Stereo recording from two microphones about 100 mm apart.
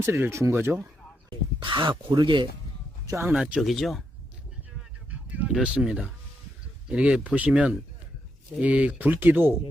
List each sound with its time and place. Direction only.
0.0 s speech: 25° right (ahead or behind)
1.5 s speech: 55° right (ahead or behind)
3.1 s speech: 25° right (ahead or behind)
3.3 s speech: 5° right (ahead or behind)
5.5 s speech: 10° right (ahead or behind)